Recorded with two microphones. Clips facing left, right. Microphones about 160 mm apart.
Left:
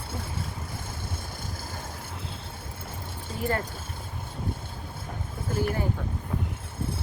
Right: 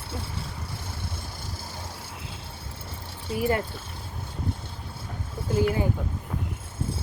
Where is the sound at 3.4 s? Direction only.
15° right (ahead or behind).